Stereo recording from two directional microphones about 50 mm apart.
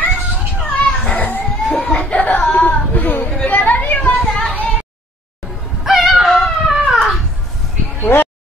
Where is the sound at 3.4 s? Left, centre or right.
Left.